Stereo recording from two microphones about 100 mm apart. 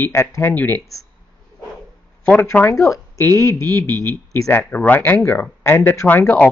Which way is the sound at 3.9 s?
40° right (ahead or behind).